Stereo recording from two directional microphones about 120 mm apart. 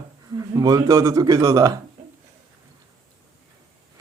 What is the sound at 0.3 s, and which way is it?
Speech, 30° right (ahead or behind).